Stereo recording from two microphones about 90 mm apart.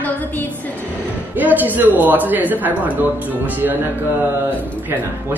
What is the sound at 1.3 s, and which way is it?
Speech, 20° right (ahead or behind).